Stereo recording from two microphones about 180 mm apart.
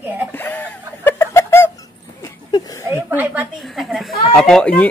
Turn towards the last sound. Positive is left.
turn(degrees=5)  # may be behind; listen again after turning